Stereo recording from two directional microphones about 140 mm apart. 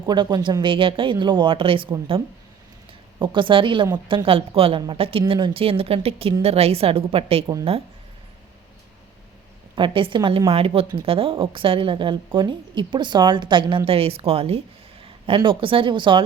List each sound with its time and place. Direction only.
0.0 s a woman's voice: 30° right (ahead or behind)
9.7 s a woman's voice: 35° right (ahead or behind)